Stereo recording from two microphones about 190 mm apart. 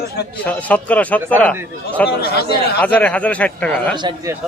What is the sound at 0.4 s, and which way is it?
Speech, 10° left (ahead or behind).